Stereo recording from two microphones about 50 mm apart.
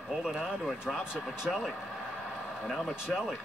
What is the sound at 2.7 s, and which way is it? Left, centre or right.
Speech, centre.